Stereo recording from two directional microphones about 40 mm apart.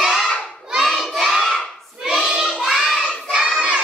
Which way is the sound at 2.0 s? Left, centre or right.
Centre.